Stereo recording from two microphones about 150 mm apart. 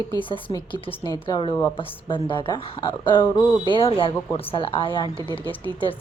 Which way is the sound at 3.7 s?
35° left (ahead or behind).